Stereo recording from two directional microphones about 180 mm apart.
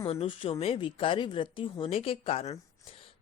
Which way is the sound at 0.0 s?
30° left (ahead or behind).